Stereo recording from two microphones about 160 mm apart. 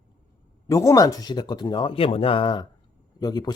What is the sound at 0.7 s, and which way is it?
Speech, 20° left (ahead or behind).